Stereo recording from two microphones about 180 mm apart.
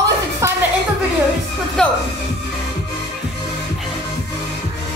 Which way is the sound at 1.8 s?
5° left (ahead or behind).